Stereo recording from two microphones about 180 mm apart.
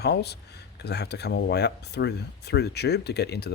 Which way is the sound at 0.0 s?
65° left (ahead or behind).